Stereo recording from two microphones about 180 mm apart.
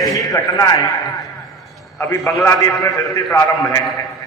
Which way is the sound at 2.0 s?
15° left (ahead or behind).